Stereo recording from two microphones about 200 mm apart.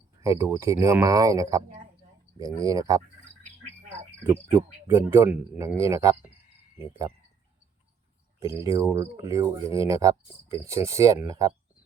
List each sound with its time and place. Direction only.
0.2 s speech: 15° right (ahead or behind)
4.2 s speech: 10° right (ahead or behind)
8.4 s speech: 15° right (ahead or behind)